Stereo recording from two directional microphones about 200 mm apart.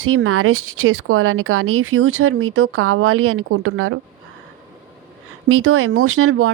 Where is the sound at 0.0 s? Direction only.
90° right.